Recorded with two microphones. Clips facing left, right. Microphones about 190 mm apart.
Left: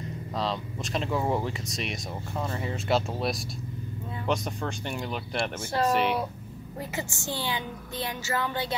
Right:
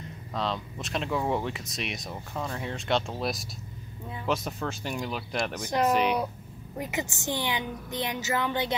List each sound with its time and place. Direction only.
0.3 s speech: centre (ahead or behind)
5.4 s speech: 15° right (ahead or behind)
5.9 s speech: centre (ahead or behind)
6.8 s a woman's voice: 20° right (ahead or behind)